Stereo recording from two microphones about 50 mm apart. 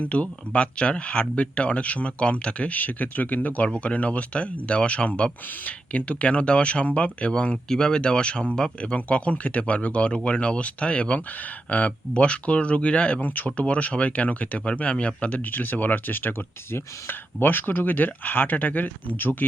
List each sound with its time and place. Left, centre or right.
0.0 s speech: left